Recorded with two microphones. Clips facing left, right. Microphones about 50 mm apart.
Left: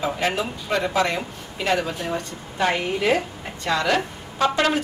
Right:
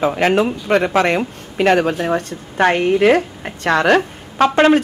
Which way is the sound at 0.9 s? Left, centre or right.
Right.